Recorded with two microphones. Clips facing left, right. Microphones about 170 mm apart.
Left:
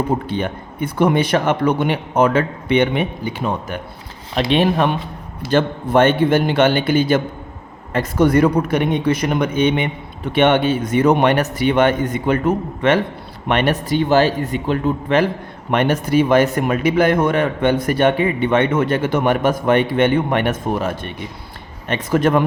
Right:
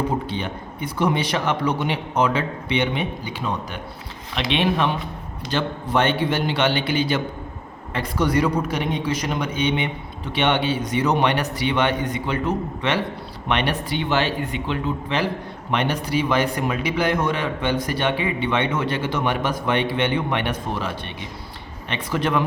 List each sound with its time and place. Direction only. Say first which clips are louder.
0.3 s a man's voice: left 5 dB; 50° left (ahead or behind)
4.4 s a man's voice: left 5 dB; 40° left (ahead or behind)